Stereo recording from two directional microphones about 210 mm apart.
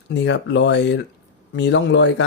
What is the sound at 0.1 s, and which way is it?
Speech, 55° left (ahead or behind).